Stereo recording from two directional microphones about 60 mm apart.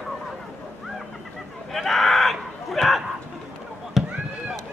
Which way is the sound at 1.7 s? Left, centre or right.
Centre.